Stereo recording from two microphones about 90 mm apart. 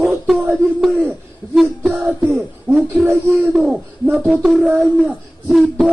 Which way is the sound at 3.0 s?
30° right (ahead or behind).